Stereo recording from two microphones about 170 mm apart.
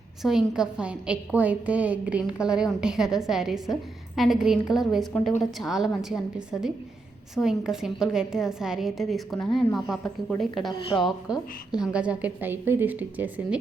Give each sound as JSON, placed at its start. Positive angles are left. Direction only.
{"t": 0.2, "sound": "a woman's voice", "side_deg": 0}
{"t": 10.7, "sound": "speech", "side_deg": 30}
{"t": 11.0, "sound": "a woman's voice", "side_deg": -5}